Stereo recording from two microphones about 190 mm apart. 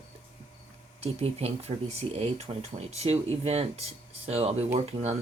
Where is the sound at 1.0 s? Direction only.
30° right (ahead or behind).